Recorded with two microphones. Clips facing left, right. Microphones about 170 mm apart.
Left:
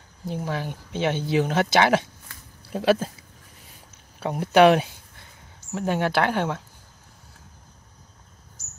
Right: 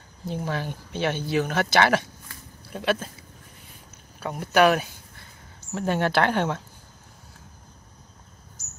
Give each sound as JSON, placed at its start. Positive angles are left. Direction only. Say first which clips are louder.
{"t": 0.3, "sound": "speech", "louder": "even", "side_deg": 10}
{"t": 2.7, "sound": "speech", "louder": "left 5 dB", "side_deg": 35}
{"t": 4.2, "sound": "speech", "louder": "left 3 dB", "side_deg": 30}
{"t": 5.7, "sound": "speech", "louder": "even", "side_deg": 10}